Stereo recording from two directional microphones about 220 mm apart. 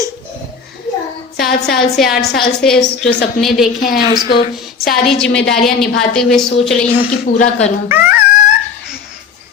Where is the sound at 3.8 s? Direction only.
40° left (ahead or behind).